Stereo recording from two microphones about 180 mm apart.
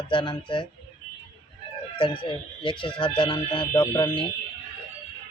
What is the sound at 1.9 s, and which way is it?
Speech, 30° left (ahead or behind).